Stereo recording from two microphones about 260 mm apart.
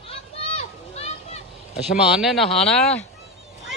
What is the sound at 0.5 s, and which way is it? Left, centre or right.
Children playing, left.